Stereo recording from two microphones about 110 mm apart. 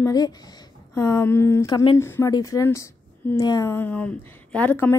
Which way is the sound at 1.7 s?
40° left (ahead or behind).